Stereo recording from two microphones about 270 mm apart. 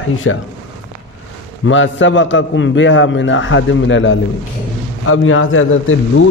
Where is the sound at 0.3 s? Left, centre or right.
Left.